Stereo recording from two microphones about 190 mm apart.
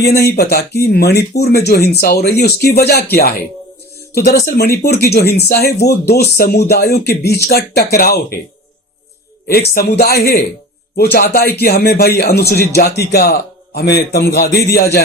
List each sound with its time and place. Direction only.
0.0 s speech: 55° left (ahead or behind)
9.5 s speech: 55° left (ahead or behind)